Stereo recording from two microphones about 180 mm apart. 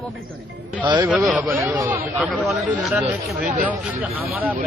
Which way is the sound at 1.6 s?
15° right (ahead or behind).